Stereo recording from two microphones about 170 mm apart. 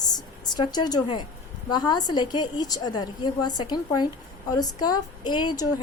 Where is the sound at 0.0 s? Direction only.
25° left (ahead or behind).